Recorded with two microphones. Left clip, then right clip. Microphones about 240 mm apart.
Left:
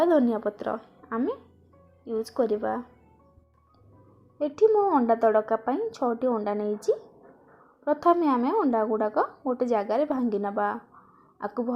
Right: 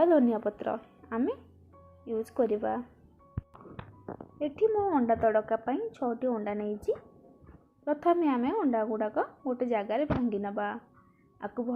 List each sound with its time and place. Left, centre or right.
0.0 s speech: left
4.6 s speech: left
8.0 s a woman's voice: left